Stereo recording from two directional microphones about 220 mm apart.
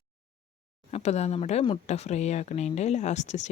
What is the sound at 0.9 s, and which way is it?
A woman's voice, 30° left (ahead or behind).